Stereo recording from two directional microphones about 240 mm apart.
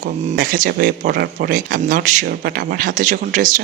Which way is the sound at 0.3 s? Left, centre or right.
Right.